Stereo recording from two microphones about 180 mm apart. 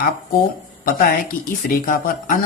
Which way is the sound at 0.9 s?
50° left (ahead or behind).